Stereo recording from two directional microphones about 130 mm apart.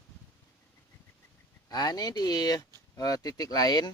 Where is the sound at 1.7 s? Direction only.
30° left (ahead or behind).